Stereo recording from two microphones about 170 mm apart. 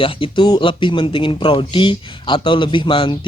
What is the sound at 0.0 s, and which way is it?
Speech, 30° left (ahead or behind).